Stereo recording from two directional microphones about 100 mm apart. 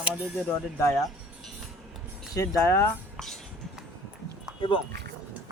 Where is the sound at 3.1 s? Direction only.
5° left (ahead or behind).